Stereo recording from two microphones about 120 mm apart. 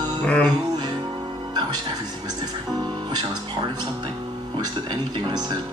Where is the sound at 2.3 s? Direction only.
35° right (ahead or behind).